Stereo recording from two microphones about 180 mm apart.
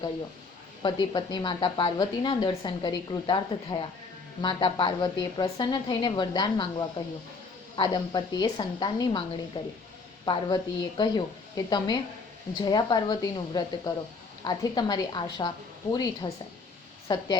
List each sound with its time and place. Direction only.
0.8 s speech: 25° left (ahead or behind)